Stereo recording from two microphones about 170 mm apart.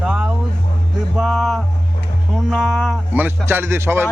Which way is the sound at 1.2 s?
Centre (ahead or behind).